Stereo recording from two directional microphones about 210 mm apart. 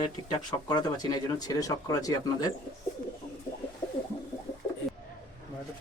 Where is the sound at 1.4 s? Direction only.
20° left (ahead or behind).